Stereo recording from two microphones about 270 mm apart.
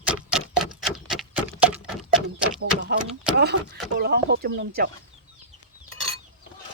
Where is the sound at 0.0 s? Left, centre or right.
Centre.